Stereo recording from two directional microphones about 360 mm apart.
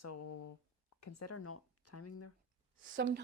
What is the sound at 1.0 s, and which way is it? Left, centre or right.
Speech, left.